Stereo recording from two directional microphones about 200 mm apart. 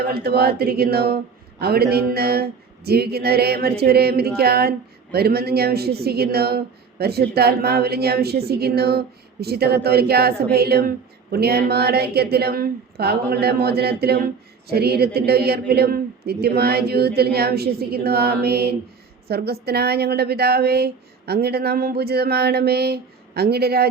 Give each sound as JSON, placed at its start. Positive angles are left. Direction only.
{"t": 0.0, "sound": "a woman's voice", "side_deg": -50}